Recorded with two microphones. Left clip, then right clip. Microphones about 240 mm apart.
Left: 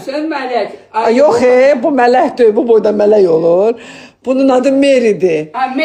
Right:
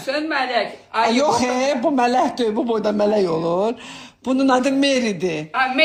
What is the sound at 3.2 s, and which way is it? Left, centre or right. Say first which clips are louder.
A man's voice: left 11 dB; right.